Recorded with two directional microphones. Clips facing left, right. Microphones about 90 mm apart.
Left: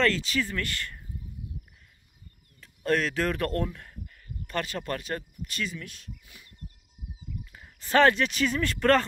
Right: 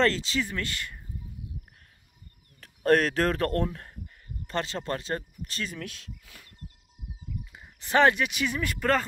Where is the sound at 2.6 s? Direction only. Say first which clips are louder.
Right 4 dB; 50° right (ahead or behind).